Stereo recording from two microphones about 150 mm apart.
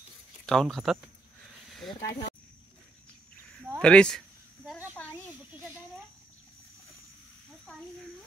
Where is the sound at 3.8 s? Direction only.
5° left (ahead or behind).